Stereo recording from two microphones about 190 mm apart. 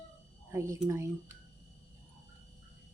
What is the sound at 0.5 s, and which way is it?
Speech, 15° right (ahead or behind).